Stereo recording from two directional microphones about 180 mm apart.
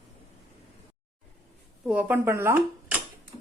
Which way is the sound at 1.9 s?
5° right (ahead or behind).